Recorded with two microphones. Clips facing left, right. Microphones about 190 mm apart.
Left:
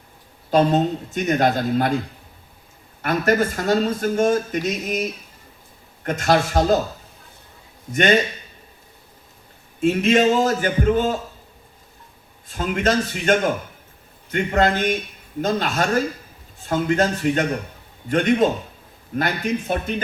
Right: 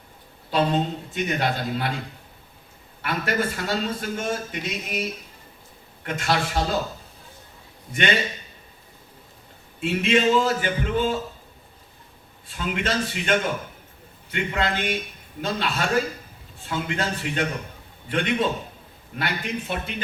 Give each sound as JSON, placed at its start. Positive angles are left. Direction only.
{"t": 0.5, "sound": "speech", "side_deg": 45}
{"t": 3.0, "sound": "speech", "side_deg": 45}
{"t": 6.1, "sound": "speech", "side_deg": 45}
{"t": 7.9, "sound": "speech", "side_deg": 45}
{"t": 9.8, "sound": "speech", "side_deg": 45}
{"t": 12.5, "sound": "speech", "side_deg": 45}